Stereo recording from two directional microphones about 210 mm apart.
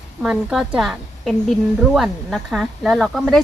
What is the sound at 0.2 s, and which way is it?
A woman's voice, 5° right (ahead or behind).